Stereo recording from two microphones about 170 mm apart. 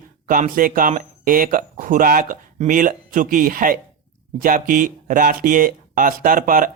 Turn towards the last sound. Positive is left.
turn(degrees=-55)  # may be behind; listen again after turning